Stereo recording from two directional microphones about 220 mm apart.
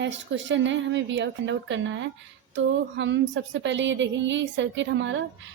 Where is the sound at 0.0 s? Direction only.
55° right (ahead or behind).